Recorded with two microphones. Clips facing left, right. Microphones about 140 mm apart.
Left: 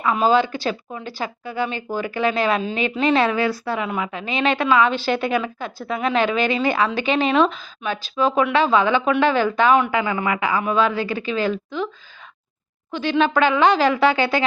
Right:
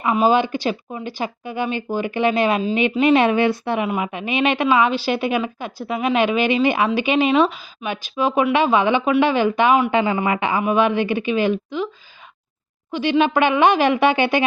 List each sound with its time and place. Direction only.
0.0 s a woman's voice: 15° right (ahead or behind)
12.9 s speech: 15° right (ahead or behind)